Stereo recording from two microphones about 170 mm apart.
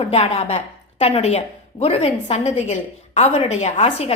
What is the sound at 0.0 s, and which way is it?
A woman's voice, 35° left (ahead or behind).